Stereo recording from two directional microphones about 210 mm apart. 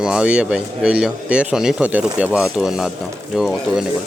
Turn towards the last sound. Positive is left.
turn(degrees=0)  # may be behind; listen again after turning